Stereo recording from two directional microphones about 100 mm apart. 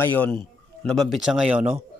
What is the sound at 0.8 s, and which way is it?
Speech, 5° left (ahead or behind).